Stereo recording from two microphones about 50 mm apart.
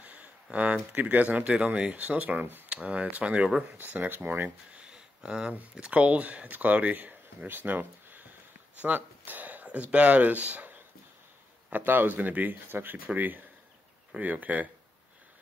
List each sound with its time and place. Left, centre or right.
0.0 s a sound: right
1.1 s speech: right
3.4 s speech: centre
3.7 s speech: right
4.7 s a sound: centre
5.5 s speech: right
11.7 s speech: right
13.0 s speech: right